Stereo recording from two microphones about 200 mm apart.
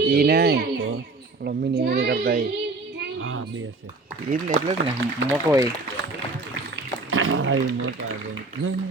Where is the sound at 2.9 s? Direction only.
80° right.